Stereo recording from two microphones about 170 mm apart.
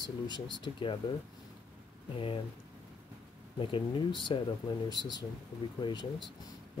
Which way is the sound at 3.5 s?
30° left (ahead or behind).